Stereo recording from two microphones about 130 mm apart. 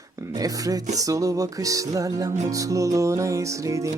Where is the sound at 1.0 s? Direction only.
25° right (ahead or behind).